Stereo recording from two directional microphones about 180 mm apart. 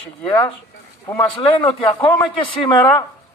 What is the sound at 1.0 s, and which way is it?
A man's voice, 25° left (ahead or behind).